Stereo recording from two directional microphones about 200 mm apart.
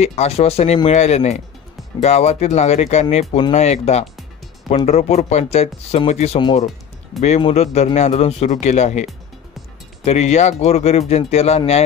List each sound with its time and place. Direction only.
0.0 s speech: 30° left (ahead or behind)
10.0 s speech: 35° left (ahead or behind)